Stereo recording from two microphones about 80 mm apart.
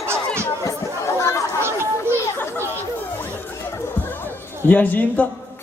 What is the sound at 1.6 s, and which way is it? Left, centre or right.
Children playing, right.